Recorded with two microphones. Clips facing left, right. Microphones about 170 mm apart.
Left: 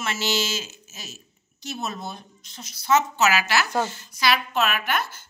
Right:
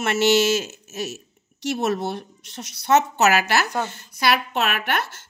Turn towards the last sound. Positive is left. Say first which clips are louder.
# right 1 dB
turn(degrees=-65)  # may be behind; listen again after turning